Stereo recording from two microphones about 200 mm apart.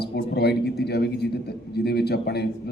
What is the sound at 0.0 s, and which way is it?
A man's voice, 55° left (ahead or behind).